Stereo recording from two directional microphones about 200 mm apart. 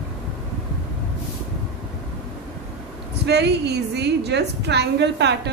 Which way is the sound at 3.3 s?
55° right (ahead or behind).